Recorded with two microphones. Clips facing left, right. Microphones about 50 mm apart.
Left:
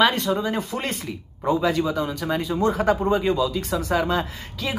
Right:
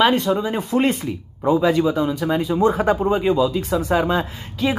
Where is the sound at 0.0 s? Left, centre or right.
Centre.